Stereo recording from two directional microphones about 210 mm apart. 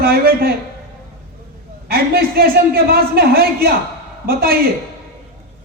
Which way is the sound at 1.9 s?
45° right (ahead or behind).